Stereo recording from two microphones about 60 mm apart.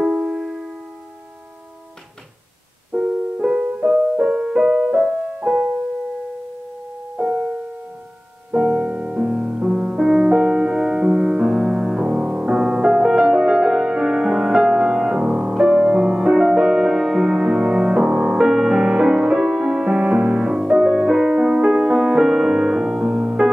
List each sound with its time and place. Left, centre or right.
0.0 s music: centre
2.9 s music: centre
7.2 s music: right